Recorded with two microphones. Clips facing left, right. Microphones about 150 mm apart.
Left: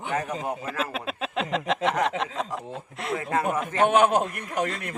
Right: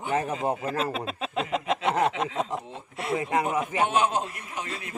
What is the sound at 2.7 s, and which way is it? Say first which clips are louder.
Speech: left 1 dB; centre (ahead or behind).